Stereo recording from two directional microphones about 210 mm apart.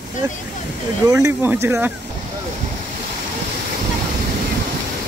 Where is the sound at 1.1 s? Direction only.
10° right (ahead or behind).